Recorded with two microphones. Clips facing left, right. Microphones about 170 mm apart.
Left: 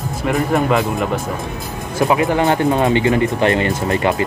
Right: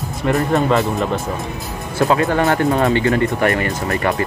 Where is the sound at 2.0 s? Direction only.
15° left (ahead or behind).